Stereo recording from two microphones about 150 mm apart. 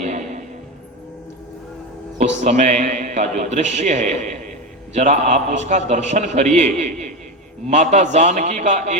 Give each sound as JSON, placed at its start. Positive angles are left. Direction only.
{"t": 0.0, "sound": "music", "side_deg": -50}
{"t": 2.1, "sound": "a man's voice", "side_deg": -50}